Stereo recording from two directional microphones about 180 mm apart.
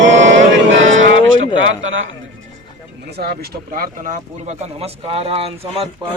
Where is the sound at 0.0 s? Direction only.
90° right.